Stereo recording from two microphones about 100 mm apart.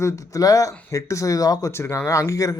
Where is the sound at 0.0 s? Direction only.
35° left (ahead or behind).